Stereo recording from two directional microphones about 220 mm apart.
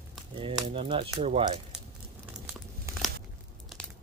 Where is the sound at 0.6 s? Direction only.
25° right (ahead or behind).